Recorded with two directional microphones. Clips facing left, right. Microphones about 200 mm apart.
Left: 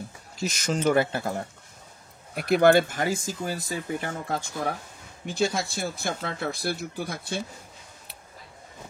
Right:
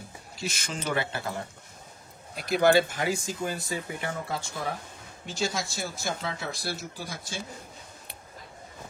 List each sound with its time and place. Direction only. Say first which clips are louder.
0.4 s speech: left 8 dB; 45° left (ahead or behind)
2.3 s speech: left 3 dB; 60° left (ahead or behind)
5.2 s speech: left 5 dB; 55° left (ahead or behind)